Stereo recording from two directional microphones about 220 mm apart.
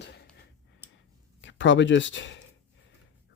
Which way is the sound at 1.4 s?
55° left (ahead or behind).